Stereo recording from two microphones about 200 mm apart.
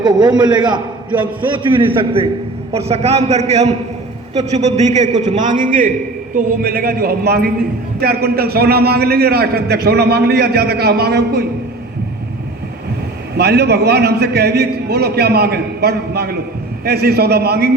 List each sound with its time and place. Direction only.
0.0 s a man's voice: 20° right (ahead or behind); by 11.4 s 55° right (ahead or behind)
13.3 s a man's voice: 55° right (ahead or behind)